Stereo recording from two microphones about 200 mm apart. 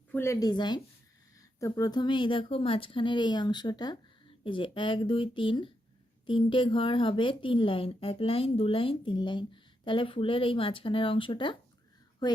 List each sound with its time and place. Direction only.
0.1 s speech: 15° left (ahead or behind)